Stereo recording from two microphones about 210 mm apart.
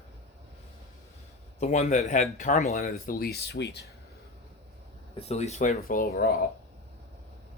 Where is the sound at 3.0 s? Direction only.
45° left (ahead or behind).